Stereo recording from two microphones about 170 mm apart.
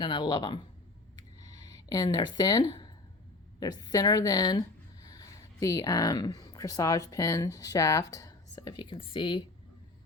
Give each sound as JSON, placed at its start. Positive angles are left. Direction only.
{"t": 0.0, "sound": "a woman's voice", "side_deg": 25}
{"t": 1.1, "sound": "a sound", "side_deg": 20}
{"t": 3.6, "sound": "a woman's voice", "side_deg": 25}